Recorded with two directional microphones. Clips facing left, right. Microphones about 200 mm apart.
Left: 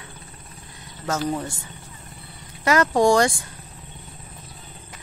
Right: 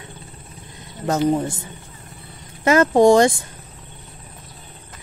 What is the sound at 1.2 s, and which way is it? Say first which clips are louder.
Speech: right 10 dB; 20° right (ahead or behind).